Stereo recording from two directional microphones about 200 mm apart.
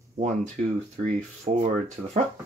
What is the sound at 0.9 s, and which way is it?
Speech, 35° right (ahead or behind).